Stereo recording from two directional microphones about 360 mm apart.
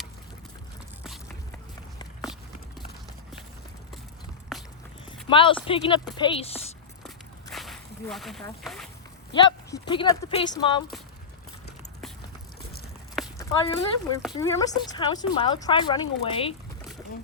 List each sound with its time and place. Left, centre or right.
4.5 s walk: centre
5.0 s clip-clop: centre
5.6 s a woman's voice: centre
7.0 s walk: centre
9.3 s speech: centre
13.1 s a sound: centre
14.3 s speech: centre